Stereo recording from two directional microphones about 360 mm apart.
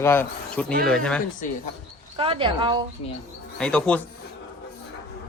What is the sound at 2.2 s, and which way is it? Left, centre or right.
Speech, centre.